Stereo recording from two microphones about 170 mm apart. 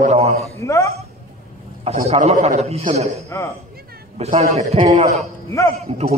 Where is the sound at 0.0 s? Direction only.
40° right (ahead or behind).